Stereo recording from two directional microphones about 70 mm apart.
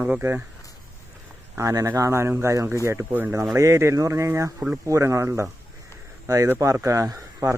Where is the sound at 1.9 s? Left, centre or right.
Right.